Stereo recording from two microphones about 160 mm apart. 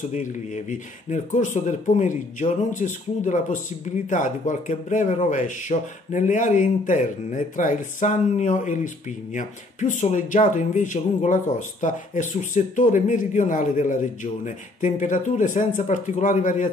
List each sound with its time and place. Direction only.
0.1 s speech: 50° left (ahead or behind)